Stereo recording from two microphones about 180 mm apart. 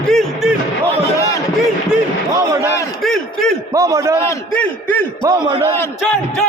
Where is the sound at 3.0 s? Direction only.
5° left (ahead or behind).